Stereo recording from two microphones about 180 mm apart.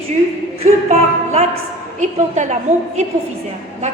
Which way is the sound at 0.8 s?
40° right (ahead or behind).